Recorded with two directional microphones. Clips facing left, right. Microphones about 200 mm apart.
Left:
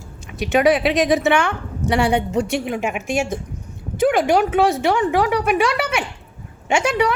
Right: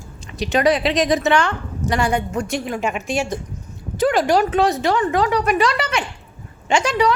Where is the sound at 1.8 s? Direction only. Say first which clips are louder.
Left 2 dB; 30° left (ahead or behind).